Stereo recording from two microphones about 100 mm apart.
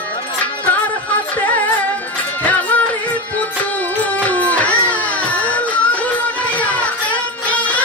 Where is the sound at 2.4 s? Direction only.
15° left (ahead or behind).